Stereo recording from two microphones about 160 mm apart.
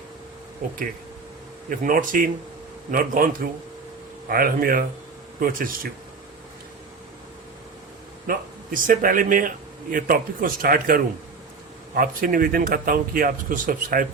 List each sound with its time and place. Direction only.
0.6 s speech: 55° right (ahead or behind)
1.8 s speech: 55° right (ahead or behind)
4.3 s speech: 65° right (ahead or behind)
8.3 s speech: 60° right (ahead or behind)